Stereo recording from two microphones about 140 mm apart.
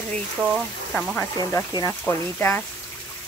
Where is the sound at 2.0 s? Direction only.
15° left (ahead or behind).